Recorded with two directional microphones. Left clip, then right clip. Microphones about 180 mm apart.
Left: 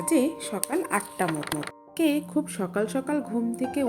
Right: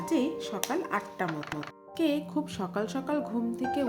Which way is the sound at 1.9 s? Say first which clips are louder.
Left 4 dB; 20° left (ahead or behind).